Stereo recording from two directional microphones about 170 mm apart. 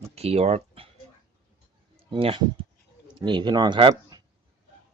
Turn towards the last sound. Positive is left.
turn(degrees=-25)  # may be behind; listen again after turning